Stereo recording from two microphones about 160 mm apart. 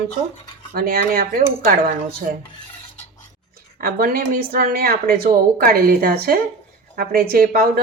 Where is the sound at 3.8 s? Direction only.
65° right (ahead or behind).